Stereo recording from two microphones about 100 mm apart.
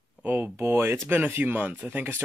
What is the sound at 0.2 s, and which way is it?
Speech, 20° right (ahead or behind).